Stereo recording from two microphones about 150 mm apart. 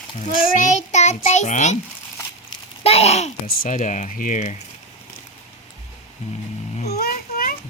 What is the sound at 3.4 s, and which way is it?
Speech, 65° left (ahead or behind).